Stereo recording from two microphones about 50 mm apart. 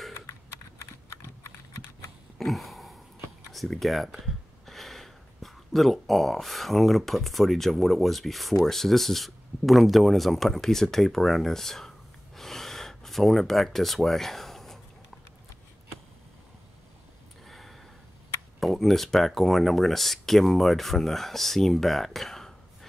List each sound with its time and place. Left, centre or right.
0.3 s typing: left
2.3 s a sound: centre
3.5 s speech: centre
12.4 s gasp: centre
17.5 s a sound: centre
18.6 s speech: centre